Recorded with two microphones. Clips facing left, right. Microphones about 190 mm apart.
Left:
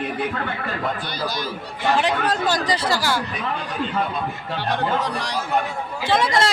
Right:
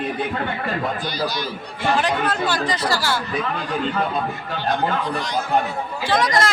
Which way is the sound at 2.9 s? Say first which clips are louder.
Even; 15° left (ahead or behind).